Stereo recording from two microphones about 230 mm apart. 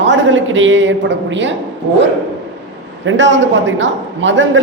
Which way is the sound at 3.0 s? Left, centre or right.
Right.